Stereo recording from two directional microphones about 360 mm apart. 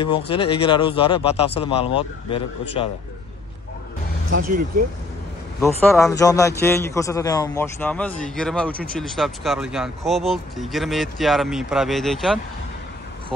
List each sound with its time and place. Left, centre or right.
0.0 s a man's voice: centre
4.3 s speech: right
5.6 s a man's voice: centre